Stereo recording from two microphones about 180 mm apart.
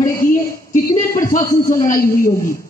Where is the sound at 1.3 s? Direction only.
15° left (ahead or behind).